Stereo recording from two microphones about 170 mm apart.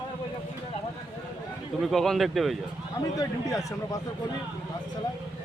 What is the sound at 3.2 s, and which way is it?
Speech, 20° left (ahead or behind).